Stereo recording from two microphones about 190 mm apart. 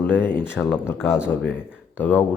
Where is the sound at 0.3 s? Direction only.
10° left (ahead or behind).